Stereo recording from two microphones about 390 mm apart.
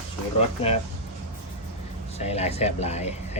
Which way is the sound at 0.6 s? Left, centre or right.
Centre.